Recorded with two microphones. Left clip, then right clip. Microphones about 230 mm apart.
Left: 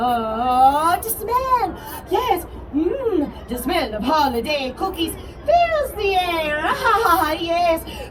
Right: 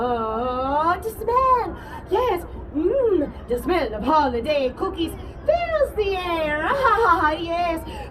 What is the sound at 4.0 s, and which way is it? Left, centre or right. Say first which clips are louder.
A man's voice: left 1 dB; centre.